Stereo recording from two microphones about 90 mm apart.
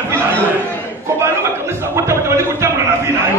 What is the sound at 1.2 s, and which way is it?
A man's voice, 25° right (ahead or behind).